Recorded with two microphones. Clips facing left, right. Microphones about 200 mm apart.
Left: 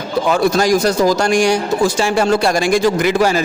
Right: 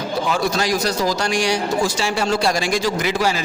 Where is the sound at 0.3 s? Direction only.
55° left (ahead or behind).